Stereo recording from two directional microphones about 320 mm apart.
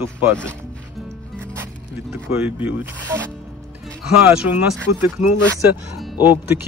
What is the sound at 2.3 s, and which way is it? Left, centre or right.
Speech, centre.